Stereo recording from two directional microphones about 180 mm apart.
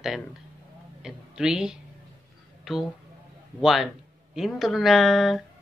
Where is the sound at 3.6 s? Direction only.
Centre (ahead or behind).